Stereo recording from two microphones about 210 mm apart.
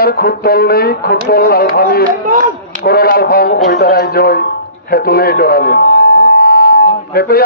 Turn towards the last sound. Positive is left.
turn(degrees=45)  # may be behind; listen again after turning